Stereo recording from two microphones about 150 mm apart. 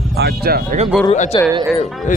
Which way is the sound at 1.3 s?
30° left (ahead or behind).